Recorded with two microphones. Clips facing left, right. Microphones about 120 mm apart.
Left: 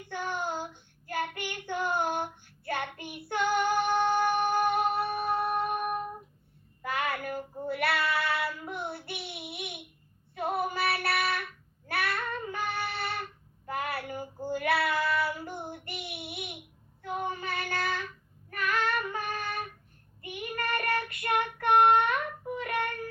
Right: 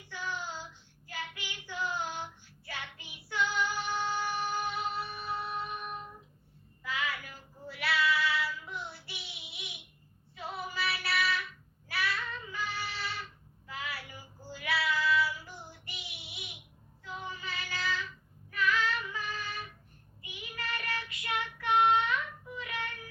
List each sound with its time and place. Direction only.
0.0 s child singing: 55° left (ahead or behind)